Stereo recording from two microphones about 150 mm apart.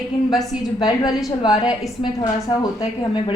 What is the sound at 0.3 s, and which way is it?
Speech, 25° left (ahead or behind).